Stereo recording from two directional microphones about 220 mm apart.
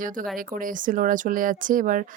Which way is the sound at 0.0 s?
40° right (ahead or behind).